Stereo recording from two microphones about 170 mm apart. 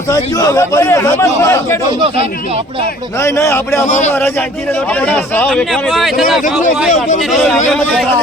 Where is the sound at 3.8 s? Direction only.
45° left (ahead or behind).